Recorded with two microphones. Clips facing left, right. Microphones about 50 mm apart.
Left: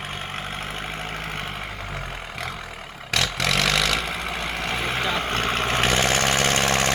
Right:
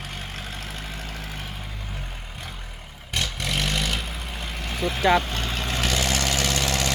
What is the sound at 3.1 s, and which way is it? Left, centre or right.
Vehicle, left.